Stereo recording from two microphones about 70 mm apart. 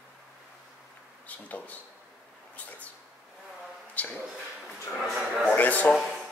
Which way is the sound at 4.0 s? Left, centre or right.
Left.